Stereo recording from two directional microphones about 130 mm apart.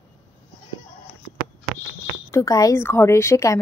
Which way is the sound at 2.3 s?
25° left (ahead or behind).